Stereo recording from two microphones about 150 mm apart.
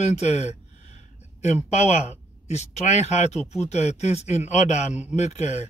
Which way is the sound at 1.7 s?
50° left (ahead or behind).